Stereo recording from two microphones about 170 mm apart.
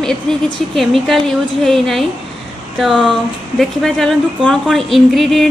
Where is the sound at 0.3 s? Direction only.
5° left (ahead or behind).